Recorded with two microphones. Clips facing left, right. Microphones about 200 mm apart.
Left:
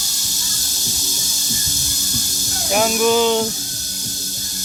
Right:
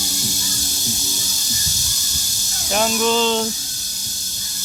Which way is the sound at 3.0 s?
10° left (ahead or behind).